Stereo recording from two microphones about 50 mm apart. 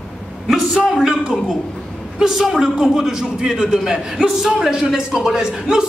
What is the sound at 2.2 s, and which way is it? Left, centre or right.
A woman's voice, centre.